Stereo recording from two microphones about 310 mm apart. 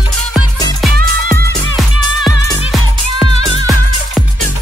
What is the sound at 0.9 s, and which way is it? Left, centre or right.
Music, right.